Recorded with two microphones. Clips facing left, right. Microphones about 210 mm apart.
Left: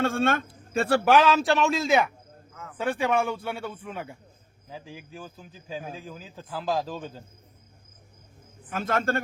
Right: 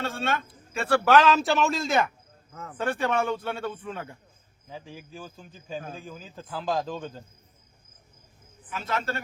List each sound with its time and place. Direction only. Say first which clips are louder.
0.0 s a man's voice: left 5 dB; 50° left (ahead or behind)
0.7 s a man's voice: left 3 dB; 35° left (ahead or behind)
1.0 s a man's voice: right 1 dB; 10° left (ahead or behind)
8.7 s a man's voice: left 5 dB; 50° left (ahead or behind)